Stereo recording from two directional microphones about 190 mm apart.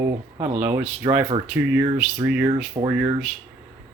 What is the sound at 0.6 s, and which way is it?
Speech, 10° right (ahead or behind).